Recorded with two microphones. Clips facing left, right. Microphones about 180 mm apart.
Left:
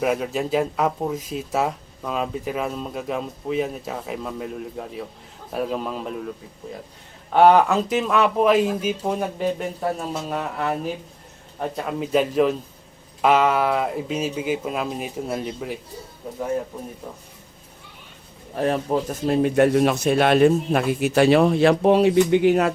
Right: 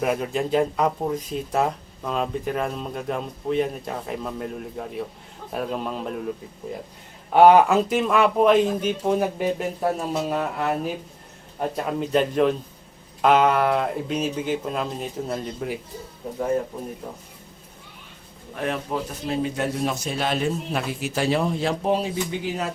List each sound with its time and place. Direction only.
0.0 s speech: centre (ahead or behind)
7.3 s speech: 10° right (ahead or behind)
7.7 s speech: centre (ahead or behind)
11.9 s speech: 5° left (ahead or behind)
18.5 s speech: 35° left (ahead or behind); by 22.7 s 65° left (ahead or behind)